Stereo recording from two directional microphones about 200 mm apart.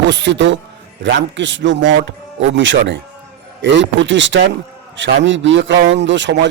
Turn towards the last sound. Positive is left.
turn(degrees=-65)  # may be behind; listen again after turning